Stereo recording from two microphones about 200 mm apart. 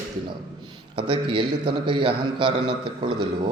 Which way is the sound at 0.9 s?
25° right (ahead or behind).